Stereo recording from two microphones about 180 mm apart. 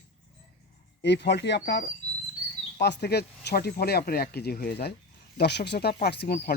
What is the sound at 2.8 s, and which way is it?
Speech, 70° left (ahead or behind).